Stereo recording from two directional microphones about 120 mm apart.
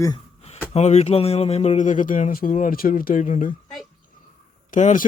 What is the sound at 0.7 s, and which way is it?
A man's voice, 65° left (ahead or behind).